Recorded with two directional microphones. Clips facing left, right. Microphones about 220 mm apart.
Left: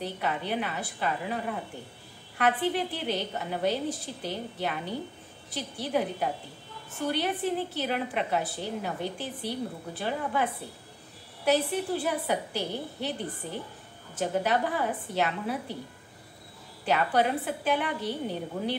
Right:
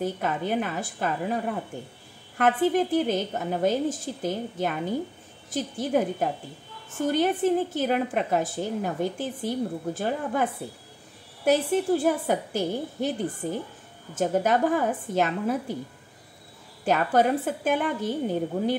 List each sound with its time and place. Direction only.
0.0 s a woman's voice: 45° right (ahead or behind)
16.8 s a woman's voice: 45° right (ahead or behind)